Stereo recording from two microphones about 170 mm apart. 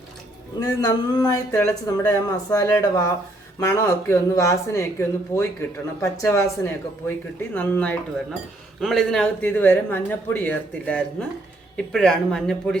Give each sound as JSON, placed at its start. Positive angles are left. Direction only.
{"t": 0.6, "sound": "a man's voice", "side_deg": 20}